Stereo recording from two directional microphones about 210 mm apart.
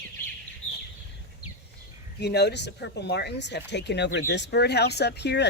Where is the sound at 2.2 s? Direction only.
50° left (ahead or behind).